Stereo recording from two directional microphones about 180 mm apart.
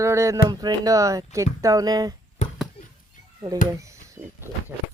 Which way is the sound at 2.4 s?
40° left (ahead or behind).